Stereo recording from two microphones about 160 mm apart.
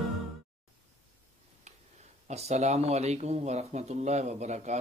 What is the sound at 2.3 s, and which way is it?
Speech, 45° right (ahead or behind).